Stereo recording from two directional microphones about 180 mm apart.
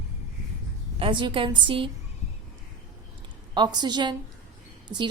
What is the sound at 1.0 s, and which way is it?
Speech, 30° right (ahead or behind).